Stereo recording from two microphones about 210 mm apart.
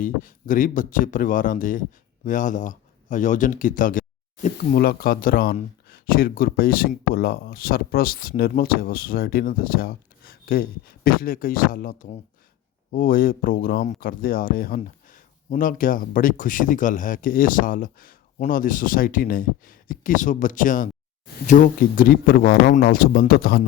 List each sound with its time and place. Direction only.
0.0 s speech: 40° left (ahead or behind)